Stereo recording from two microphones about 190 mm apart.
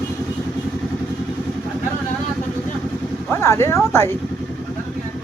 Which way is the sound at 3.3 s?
15° left (ahead or behind).